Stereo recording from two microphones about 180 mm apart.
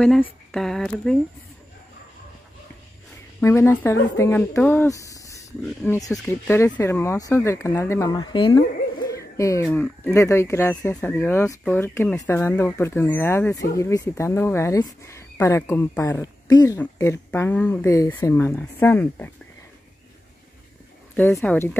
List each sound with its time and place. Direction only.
0.0 s speech: 5° left (ahead or behind)
3.3 s speech: 15° left (ahead or behind)
21.4 s speech: 10° left (ahead or behind)